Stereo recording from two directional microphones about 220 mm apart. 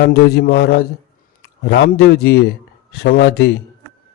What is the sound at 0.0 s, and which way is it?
A man's voice, 45° left (ahead or behind).